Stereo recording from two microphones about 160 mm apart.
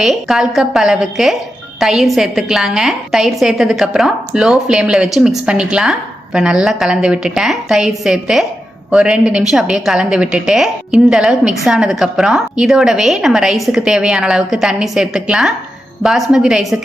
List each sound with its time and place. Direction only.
0.0 s a woman's voice: centre (ahead or behind)